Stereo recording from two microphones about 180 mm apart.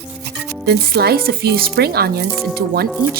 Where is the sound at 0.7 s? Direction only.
60° right (ahead or behind).